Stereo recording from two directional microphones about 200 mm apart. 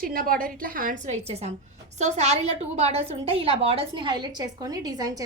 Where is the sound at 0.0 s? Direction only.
45° right (ahead or behind).